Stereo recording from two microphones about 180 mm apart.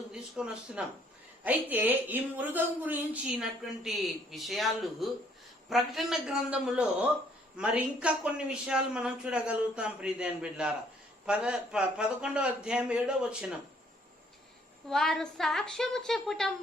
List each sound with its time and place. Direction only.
0.1 s a sound: 5° right (ahead or behind)
1.5 s a woman's voice: 10° right (ahead or behind)
14.8 s a woman's voice: centre (ahead or behind)